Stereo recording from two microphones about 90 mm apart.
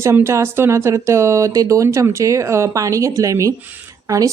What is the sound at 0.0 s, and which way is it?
A woman's voice, 30° right (ahead or behind).